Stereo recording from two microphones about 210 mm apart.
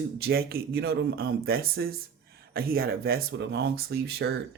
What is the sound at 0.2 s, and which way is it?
Speech, 50° right (ahead or behind).